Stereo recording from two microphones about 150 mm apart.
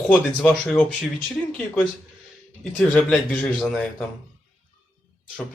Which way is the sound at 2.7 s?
10° left (ahead or behind).